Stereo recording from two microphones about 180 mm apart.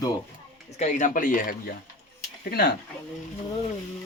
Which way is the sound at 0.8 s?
45° left (ahead or behind).